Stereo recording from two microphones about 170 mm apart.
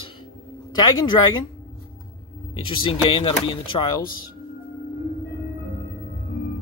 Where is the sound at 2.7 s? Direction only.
30° left (ahead or behind).